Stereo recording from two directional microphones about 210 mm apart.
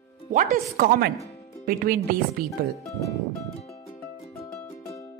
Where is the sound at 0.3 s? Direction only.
40° right (ahead or behind).